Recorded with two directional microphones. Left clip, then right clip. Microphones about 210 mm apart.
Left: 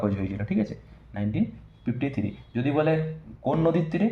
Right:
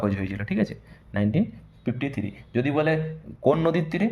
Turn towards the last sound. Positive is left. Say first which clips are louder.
# even
turn(degrees=-60)  # may be behind; listen again after turning